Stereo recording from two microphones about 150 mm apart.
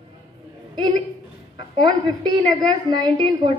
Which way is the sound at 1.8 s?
30° right (ahead or behind).